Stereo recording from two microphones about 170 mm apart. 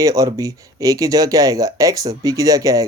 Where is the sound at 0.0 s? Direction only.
20° right (ahead or behind).